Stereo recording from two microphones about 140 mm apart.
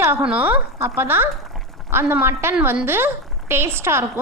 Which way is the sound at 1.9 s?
15° right (ahead or behind).